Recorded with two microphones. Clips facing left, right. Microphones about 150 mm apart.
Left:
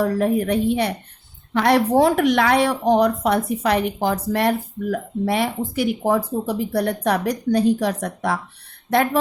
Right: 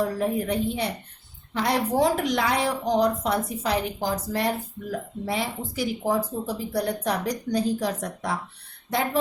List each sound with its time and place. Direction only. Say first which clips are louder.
0.0 s a woman's voice: left 6 dB; 70° left (ahead or behind)